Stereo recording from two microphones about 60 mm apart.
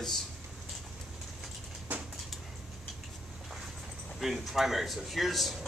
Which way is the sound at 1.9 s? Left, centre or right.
Right.